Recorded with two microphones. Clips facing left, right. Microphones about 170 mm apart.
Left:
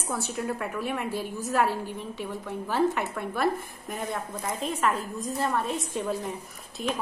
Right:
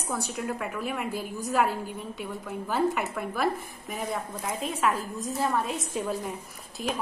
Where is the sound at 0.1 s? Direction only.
Centre (ahead or behind).